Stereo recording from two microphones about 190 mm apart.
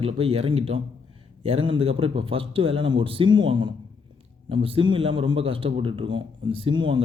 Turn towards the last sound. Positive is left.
turn(degrees=-25)  # may be behind; listen again after turning